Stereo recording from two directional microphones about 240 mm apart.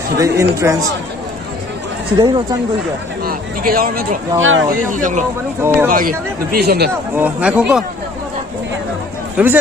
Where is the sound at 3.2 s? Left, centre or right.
Right.